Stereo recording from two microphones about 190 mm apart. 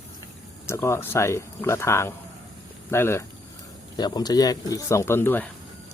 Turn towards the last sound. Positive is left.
turn(degrees=10)  # may be behind; listen again after turning